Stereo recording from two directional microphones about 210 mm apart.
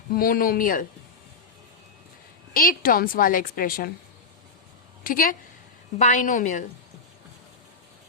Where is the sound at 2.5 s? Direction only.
40° left (ahead or behind).